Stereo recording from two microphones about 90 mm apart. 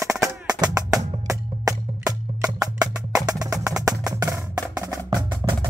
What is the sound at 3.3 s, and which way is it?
Music, 40° right (ahead or behind).